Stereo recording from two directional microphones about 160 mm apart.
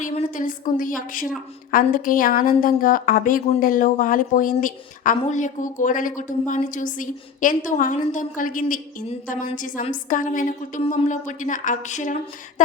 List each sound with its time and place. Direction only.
0.1 s a woman's voice: 50° left (ahead or behind)